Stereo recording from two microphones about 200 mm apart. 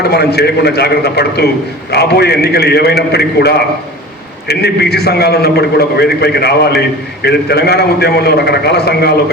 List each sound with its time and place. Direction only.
0.0 s a man's voice: 55° left (ahead or behind)